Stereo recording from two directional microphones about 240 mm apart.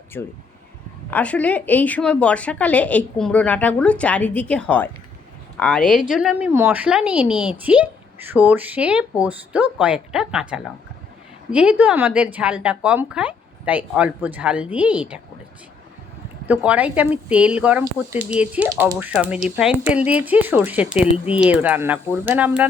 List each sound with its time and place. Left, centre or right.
0.1 s a woman's voice: centre
16.5 s speech: centre